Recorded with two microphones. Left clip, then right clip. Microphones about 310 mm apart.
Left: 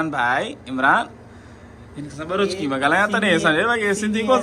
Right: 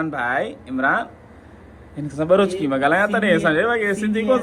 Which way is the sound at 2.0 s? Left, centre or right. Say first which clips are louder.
Right 6 dB; centre.